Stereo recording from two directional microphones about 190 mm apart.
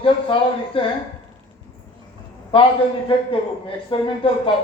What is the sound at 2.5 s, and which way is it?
A man's voice, 30° left (ahead or behind).